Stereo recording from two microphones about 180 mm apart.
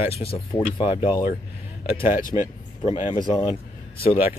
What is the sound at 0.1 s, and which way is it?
Speech, 30° left (ahead or behind).